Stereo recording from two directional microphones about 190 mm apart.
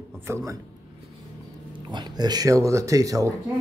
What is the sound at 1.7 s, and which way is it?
Speech, 25° right (ahead or behind).